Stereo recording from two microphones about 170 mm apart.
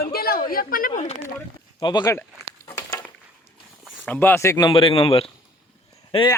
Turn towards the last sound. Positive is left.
turn(degrees=25)  # may be behind; listen again after turning